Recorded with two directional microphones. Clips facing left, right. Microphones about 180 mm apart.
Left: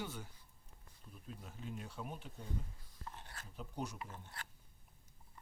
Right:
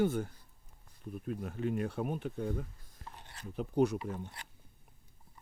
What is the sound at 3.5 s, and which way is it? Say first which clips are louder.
Speech: right 15 dB; 65° right (ahead or behind).